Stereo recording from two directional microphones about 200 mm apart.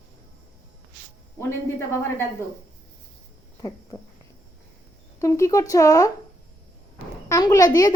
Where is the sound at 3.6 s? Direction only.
20° left (ahead or behind).